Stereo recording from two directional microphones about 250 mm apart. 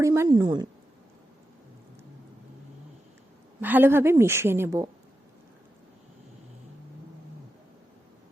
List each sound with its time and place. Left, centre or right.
0.0 s a woman's voice: centre
3.6 s a woman's voice: centre